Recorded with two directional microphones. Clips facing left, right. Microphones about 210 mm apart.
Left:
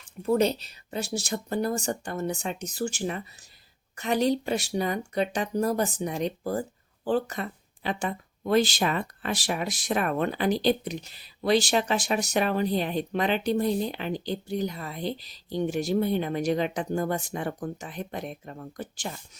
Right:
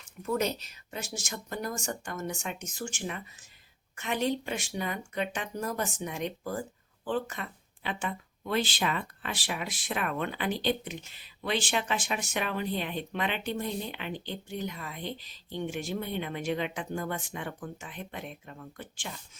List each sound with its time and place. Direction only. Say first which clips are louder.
0.0 s speech: left 7 dB; 30° left (ahead or behind)